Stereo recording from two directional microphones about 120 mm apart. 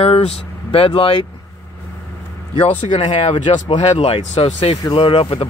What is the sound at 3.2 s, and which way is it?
Speech, 60° left (ahead or behind).